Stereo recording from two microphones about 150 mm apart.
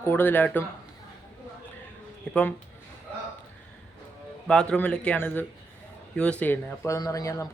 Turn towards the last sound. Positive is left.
turn(degrees=20)  # may be behind; listen again after turning